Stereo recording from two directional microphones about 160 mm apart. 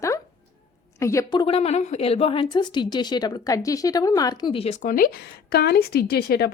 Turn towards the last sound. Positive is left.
turn(degrees=80)